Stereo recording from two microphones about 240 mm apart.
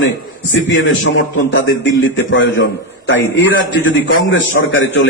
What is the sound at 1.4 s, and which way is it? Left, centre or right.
A man's voice, left.